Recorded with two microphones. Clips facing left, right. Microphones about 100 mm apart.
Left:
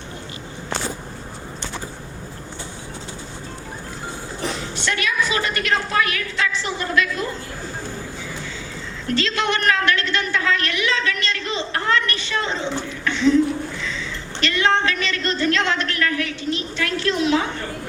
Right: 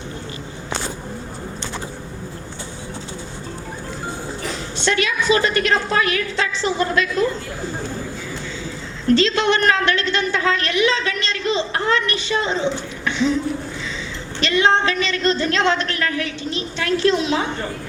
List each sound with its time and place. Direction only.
4.8 s a man's voice: 25° right (ahead or behind)
9.1 s a man's voice: 25° right (ahead or behind)
13.1 s a sound: 15° right (ahead or behind)
14.4 s a man's voice: 20° right (ahead or behind)